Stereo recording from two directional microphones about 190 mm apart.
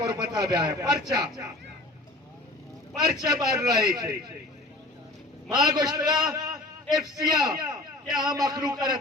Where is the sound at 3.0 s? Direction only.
20° right (ahead or behind).